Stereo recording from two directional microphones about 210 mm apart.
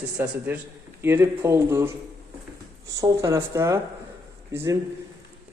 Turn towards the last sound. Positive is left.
turn(degrees=-15)  # may be behind; listen again after turning